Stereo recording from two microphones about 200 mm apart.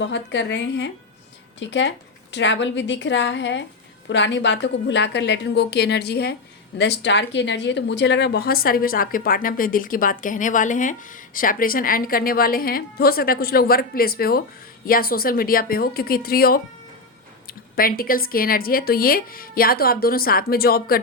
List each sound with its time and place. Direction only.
0.0 s a woman's voice: 65° left (ahead or behind)